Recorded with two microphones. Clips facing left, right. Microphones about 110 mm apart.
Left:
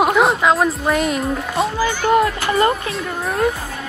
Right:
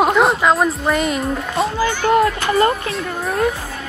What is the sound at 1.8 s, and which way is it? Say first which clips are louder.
Speech: right 1 dB; 10° left (ahead or behind).